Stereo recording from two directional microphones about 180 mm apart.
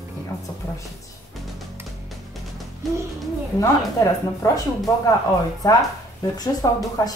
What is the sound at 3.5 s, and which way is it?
A woman's voice, 20° left (ahead or behind).